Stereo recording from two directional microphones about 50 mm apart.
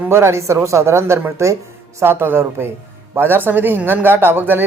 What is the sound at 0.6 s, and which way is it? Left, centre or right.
Speech, right.